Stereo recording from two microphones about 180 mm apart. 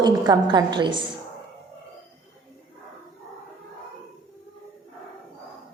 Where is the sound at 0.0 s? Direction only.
25° right (ahead or behind).